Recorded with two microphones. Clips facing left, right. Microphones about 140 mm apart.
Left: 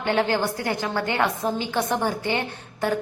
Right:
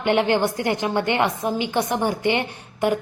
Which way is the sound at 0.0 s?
20° right (ahead or behind).